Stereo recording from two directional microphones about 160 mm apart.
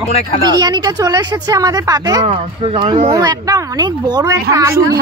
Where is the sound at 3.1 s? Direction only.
25° right (ahead or behind).